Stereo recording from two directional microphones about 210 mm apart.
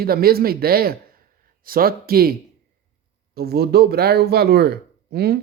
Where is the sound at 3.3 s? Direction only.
50° right (ahead or behind).